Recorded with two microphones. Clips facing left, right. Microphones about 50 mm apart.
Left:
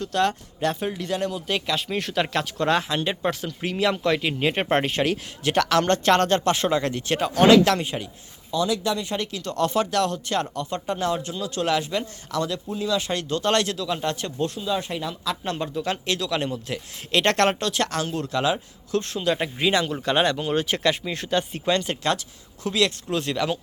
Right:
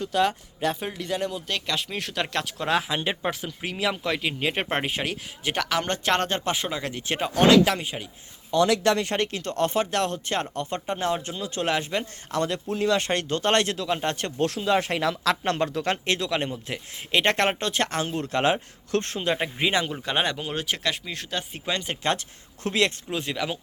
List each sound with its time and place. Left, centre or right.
0.0 s speech: centre
6.6 s speech: centre
7.1 s speech: centre
8.4 s speech: right
12.6 s speech: right
14.4 s speech: right; by 17.6 s centre
17.6 s speech: right
19.3 s speech: centre
21.7 s speech: centre
22.6 s speech: right
23.0 s speech: centre